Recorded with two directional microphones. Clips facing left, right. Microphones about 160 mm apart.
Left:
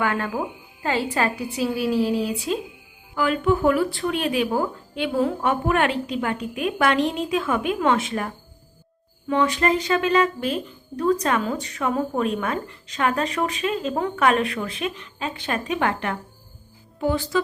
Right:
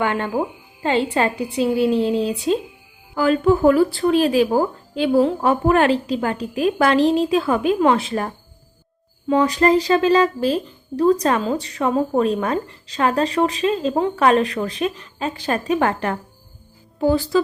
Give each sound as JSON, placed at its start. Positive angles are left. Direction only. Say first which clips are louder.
{"t": 0.0, "sound": "speech", "louder": "right 3 dB", "side_deg": -30}
{"t": 1.1, "sound": "a sound", "louder": "right 4 dB", "side_deg": -30}
{"t": 3.2, "sound": "speech", "louder": "right 5 dB", "side_deg": -35}
{"t": 9.3, "sound": "speech", "louder": "right 5 dB", "side_deg": -35}